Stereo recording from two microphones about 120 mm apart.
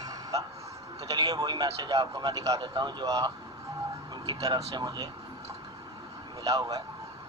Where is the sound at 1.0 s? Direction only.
30° right (ahead or behind).